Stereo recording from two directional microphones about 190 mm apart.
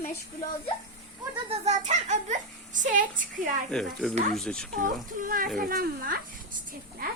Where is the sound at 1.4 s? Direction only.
35° right (ahead or behind).